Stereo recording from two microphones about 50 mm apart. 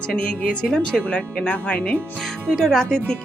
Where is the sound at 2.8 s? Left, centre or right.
Centre.